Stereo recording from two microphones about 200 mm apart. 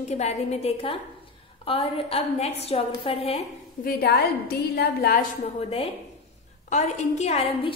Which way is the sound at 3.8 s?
50° left (ahead or behind).